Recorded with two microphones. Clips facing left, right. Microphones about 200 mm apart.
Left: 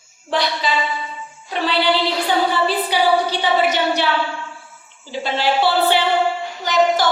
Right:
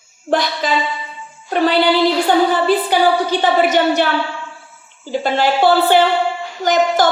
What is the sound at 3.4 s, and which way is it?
Speech, 50° right (ahead or behind).